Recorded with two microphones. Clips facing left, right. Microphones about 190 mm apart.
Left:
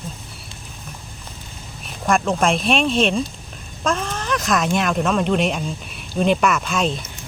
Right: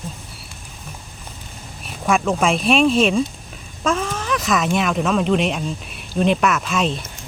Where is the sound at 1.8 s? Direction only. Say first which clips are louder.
Even; 5° right (ahead or behind).